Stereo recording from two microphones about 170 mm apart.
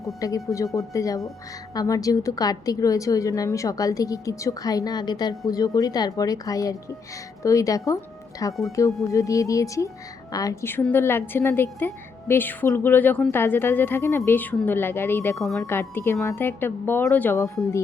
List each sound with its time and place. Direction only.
0.0 s a woman's voice: 20° left (ahead or behind)